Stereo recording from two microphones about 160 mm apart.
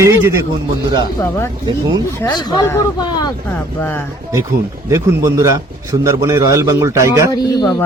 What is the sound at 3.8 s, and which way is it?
Speech, 15° left (ahead or behind).